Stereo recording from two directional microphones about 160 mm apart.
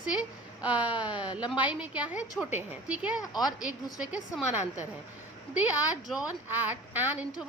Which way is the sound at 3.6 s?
5° right (ahead or behind).